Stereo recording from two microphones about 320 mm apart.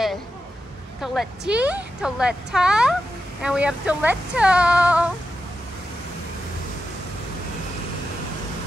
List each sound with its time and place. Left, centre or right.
1.0 s a woman's voice: centre